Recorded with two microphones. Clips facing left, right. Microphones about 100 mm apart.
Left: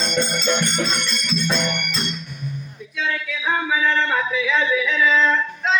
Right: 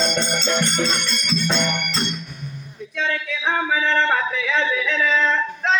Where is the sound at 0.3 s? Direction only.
70° right (ahead or behind).